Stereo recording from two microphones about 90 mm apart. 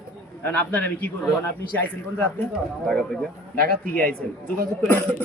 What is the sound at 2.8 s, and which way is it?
Speech, 5° left (ahead or behind).